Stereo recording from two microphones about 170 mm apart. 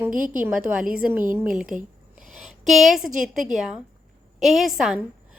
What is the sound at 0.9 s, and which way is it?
A woman's voice, 10° right (ahead or behind).